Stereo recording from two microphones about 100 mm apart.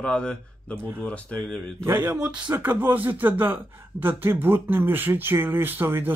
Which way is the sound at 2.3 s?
15° right (ahead or behind).